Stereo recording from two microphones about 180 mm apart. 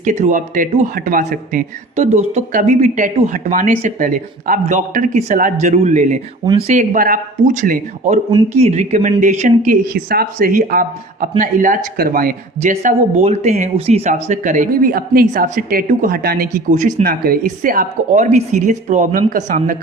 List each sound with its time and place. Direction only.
0.0 s a woman's voice: 45° right (ahead or behind)
9.8 s speech: 60° right (ahead or behind); by 19.7 s 40° right (ahead or behind)